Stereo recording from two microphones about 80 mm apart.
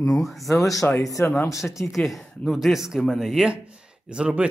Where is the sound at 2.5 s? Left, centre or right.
Centre.